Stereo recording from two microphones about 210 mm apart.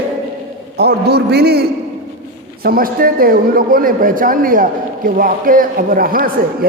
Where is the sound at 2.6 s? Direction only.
45° right (ahead or behind).